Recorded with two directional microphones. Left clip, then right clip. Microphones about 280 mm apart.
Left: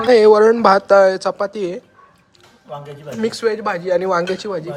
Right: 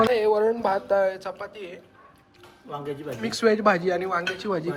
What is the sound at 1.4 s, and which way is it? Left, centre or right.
Speech, centre.